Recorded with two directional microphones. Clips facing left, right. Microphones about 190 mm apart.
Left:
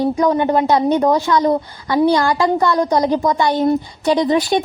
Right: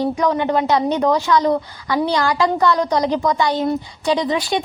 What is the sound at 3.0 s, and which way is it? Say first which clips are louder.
Speech: left 2 dB; 25° left (ahead or behind).